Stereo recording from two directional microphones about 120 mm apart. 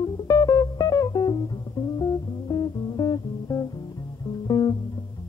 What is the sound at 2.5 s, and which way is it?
Music, 35° left (ahead or behind).